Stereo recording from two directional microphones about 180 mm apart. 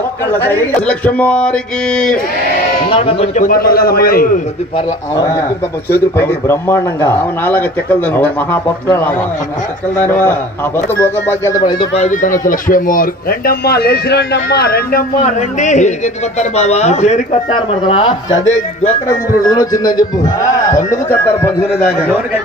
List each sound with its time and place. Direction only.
0.5 s speech: 10° left (ahead or behind)
2.9 s speech: 30° left (ahead or behind)
3.4 s speech: 55° left (ahead or behind)
4.7 s a man's voice: 20° left (ahead or behind)
11.0 s speech: 15° left (ahead or behind)
12.0 s speech: 45° left (ahead or behind)
15.6 s speech: 40° left (ahead or behind)
19.5 s a man's voice: 20° left (ahead or behind)